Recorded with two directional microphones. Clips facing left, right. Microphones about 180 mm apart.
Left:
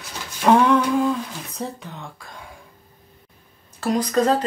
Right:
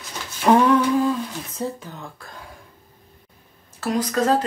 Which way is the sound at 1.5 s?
Centre (ahead or behind).